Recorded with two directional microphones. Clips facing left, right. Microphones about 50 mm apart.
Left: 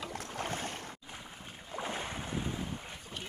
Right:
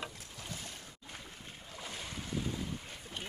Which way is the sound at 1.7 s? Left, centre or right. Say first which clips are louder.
Left 7 dB; left.